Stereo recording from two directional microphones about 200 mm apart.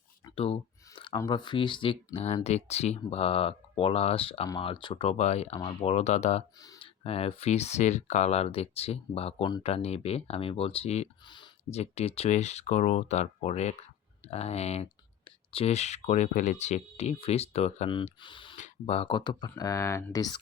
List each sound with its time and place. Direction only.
0.3 s speech: 30° left (ahead or behind)
6.6 s speech: 20° left (ahead or behind)